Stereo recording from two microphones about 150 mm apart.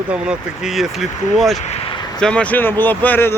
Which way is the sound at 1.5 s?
50° left (ahead or behind).